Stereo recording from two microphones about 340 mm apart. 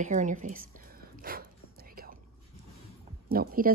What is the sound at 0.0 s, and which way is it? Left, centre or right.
A woman's voice, right.